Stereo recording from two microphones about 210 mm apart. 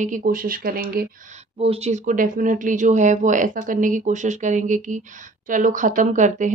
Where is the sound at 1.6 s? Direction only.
30° right (ahead or behind).